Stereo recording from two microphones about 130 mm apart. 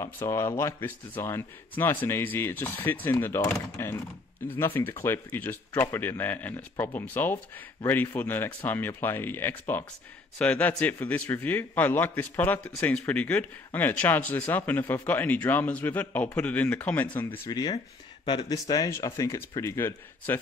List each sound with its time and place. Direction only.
0.0 s speech: 20° left (ahead or behind)
17.5 s speech: 30° left (ahead or behind)